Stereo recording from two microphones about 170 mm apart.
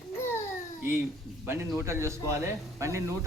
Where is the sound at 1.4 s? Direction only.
15° right (ahead or behind).